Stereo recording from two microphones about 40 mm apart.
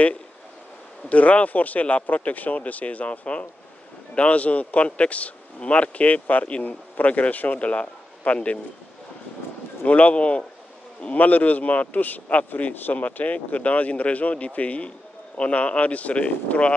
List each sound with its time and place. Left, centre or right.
1.0 s a man's voice: left
9.8 s a man's voice: left